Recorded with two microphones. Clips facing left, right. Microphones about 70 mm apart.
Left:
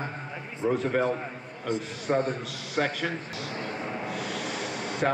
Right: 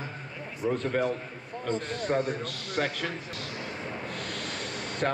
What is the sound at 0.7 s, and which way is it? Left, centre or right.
A man's voice, centre.